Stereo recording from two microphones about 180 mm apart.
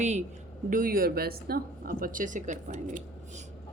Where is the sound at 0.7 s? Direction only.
50° right (ahead or behind).